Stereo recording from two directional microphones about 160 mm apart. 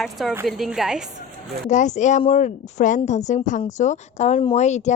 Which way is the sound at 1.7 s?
50° left (ahead or behind).